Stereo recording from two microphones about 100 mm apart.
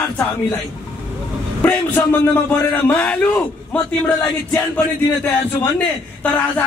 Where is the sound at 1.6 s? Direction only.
15° left (ahead or behind).